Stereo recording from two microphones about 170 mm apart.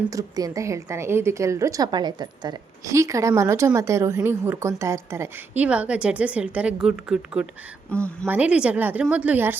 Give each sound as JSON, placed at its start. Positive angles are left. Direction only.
{"t": 0.1, "sound": "a woman's voice", "side_deg": -20}
{"t": 7.9, "sound": "a woman's voice", "side_deg": 5}
{"t": 8.3, "sound": "a woman's voice", "side_deg": -10}